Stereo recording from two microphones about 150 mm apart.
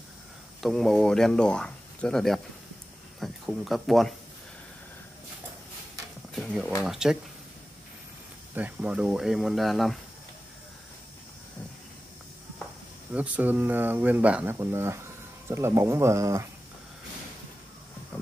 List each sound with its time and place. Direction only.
0.6 s speech: centre (ahead or behind)
6.3 s a sound: centre (ahead or behind)
6.8 s speech: 5° right (ahead or behind)
8.5 s speech: 10° right (ahead or behind)
13.1 s speech: 10° right (ahead or behind)